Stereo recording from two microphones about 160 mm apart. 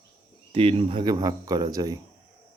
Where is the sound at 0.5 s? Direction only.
35° right (ahead or behind).